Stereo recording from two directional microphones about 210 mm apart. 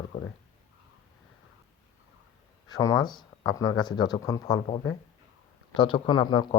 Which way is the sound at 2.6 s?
15° left (ahead or behind).